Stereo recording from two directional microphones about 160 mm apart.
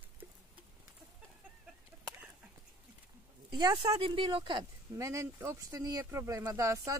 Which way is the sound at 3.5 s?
25° right (ahead or behind).